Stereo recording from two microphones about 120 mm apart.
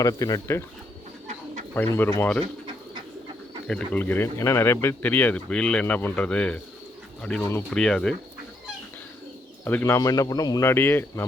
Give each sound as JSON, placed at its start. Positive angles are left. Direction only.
{"t": 0.0, "sound": "speech", "side_deg": 30}
{"t": 2.0, "sound": "speech", "side_deg": 20}
{"t": 3.7, "sound": "speech", "side_deg": 10}
{"t": 9.6, "sound": "speech", "side_deg": 20}
{"t": 10.7, "sound": "speech", "side_deg": 20}